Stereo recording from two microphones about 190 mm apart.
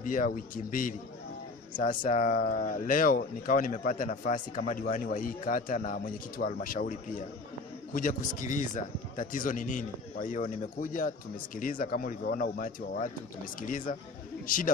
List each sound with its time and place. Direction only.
0.0 s a man's voice: 45° left (ahead or behind)